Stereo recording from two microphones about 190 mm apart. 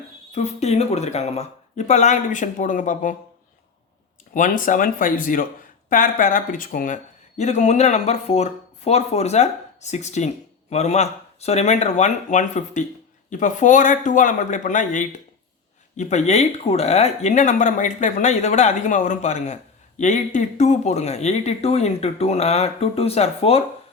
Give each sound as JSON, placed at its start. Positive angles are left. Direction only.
{"t": 0.3, "sound": "speech", "side_deg": 35}
{"t": 4.4, "sound": "speech", "side_deg": 45}